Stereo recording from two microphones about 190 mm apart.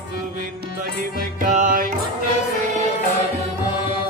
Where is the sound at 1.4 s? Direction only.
45° right (ahead or behind).